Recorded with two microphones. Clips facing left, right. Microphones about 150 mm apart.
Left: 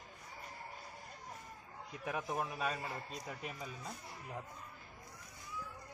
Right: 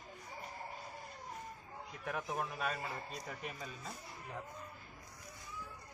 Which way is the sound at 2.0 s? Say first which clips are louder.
Left 1 dB; 5° left (ahead or behind).